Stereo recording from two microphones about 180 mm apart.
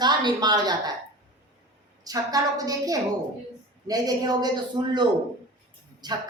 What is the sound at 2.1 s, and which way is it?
A woman's voice, 20° right (ahead or behind).